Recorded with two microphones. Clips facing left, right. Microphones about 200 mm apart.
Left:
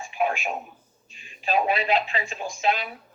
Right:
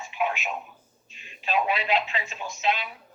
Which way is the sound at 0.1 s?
45° left (ahead or behind).